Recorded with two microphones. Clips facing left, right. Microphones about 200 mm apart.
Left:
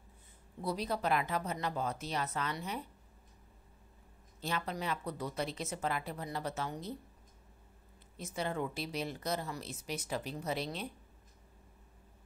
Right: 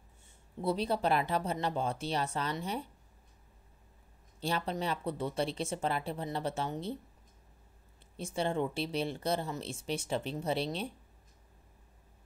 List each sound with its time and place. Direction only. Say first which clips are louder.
0.6 s speech: right 4 dB; 25° right (ahead or behind)
4.4 s speech: right 4 dB; 30° right (ahead or behind)
8.2 s speech: right 4 dB; 30° right (ahead or behind)